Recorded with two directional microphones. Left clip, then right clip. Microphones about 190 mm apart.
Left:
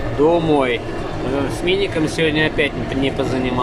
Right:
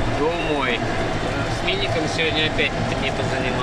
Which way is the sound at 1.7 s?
40° left (ahead or behind).